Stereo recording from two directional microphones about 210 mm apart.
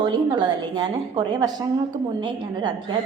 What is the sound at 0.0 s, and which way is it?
A woman's voice, 20° right (ahead or behind).